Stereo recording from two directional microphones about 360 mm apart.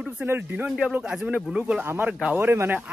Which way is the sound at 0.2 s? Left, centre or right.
Centre.